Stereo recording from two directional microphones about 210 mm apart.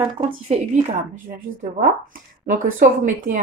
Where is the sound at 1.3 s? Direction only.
40° right (ahead or behind).